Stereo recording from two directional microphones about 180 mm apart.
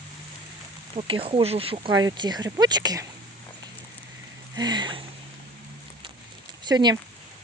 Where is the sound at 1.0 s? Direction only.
30° right (ahead or behind).